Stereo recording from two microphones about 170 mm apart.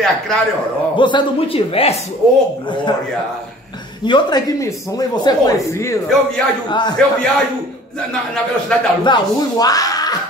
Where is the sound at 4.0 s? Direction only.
25° left (ahead or behind).